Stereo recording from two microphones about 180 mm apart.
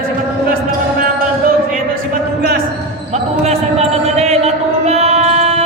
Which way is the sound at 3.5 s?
35° right (ahead or behind).